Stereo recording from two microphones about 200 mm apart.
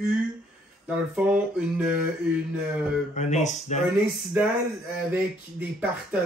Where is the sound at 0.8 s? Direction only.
5° right (ahead or behind).